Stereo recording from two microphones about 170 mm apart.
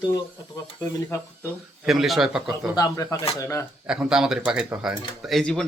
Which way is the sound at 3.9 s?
5° right (ahead or behind).